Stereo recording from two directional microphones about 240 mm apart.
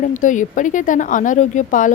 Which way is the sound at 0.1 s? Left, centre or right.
Left.